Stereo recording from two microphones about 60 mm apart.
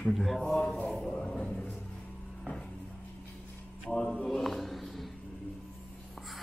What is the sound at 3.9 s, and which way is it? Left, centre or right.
Speech, centre.